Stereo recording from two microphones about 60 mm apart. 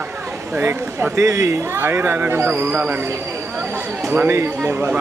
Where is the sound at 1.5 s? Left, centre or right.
Right.